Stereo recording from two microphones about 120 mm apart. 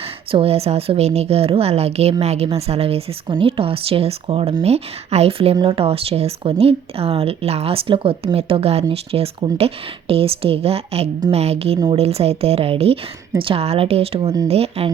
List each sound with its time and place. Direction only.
0.3 s a woman's voice: 50° right (ahead or behind)